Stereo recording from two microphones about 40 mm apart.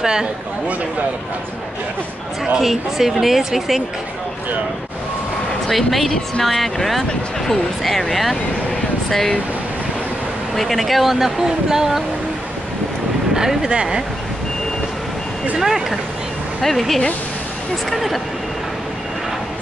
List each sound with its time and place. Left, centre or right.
0.0 s speech: centre
2.6 s speech: centre
5.7 s speech: centre
10.5 s speech: centre
13.3 s speech: centre
15.6 s speech: centre
16.6 s speech: centre